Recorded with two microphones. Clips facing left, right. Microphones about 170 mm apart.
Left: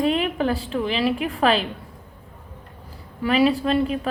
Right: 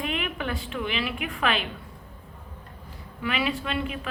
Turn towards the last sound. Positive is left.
turn(degrees=35)  # may be behind; listen again after turning